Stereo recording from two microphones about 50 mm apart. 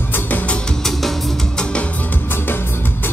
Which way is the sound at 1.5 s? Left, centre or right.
Left.